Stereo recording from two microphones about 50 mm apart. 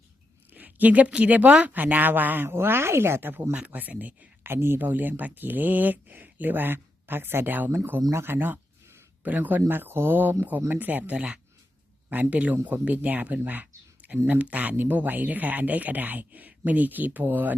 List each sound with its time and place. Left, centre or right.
0.5 s a woman's voice: right
3.5 s speech: right
4.4 s speech: right
8.1 s a woman's voice: right
9.2 s a woman's voice: right
12.0 s speech: right